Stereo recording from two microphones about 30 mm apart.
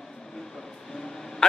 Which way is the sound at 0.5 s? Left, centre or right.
Centre.